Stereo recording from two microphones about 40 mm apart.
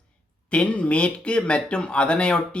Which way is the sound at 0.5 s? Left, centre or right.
Left.